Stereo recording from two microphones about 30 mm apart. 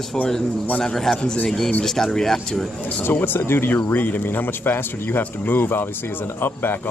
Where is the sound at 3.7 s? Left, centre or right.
Left.